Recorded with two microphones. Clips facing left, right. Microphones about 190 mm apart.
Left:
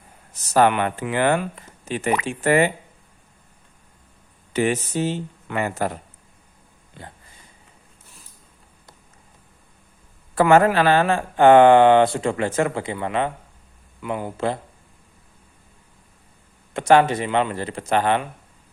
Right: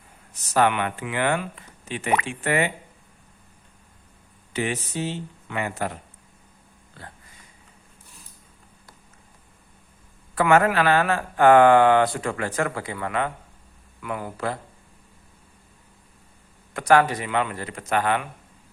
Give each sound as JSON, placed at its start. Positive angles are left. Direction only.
{"t": 0.5, "sound": "speech", "side_deg": 40}
{"t": 4.5, "sound": "speech", "side_deg": 45}
{"t": 7.0, "sound": "speech", "side_deg": 20}
{"t": 10.3, "sound": "speech", "side_deg": 35}
{"t": 16.7, "sound": "speech", "side_deg": 25}